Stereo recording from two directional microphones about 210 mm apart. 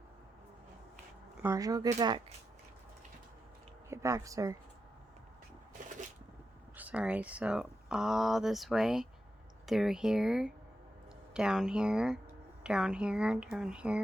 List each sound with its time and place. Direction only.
1.4 s speech: 15° right (ahead or behind)
3.8 s speech: 15° right (ahead or behind)
6.7 s speech: 5° right (ahead or behind)